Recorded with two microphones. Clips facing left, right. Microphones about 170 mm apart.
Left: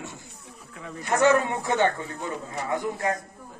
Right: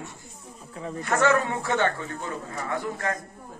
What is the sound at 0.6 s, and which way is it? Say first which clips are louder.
Speech: right 5 dB; 30° right (ahead or behind).